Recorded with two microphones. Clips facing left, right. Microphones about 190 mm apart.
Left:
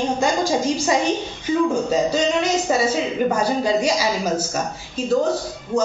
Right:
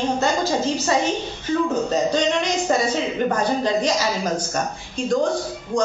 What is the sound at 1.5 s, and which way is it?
A woman's voice, 10° left (ahead or behind).